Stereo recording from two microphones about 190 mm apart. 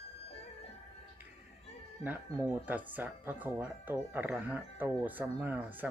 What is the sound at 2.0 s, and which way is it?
Speech, 35° left (ahead or behind).